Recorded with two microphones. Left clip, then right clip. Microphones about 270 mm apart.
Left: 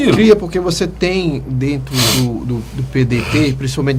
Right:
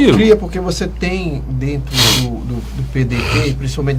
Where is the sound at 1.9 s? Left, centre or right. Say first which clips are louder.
Right 3 dB; right.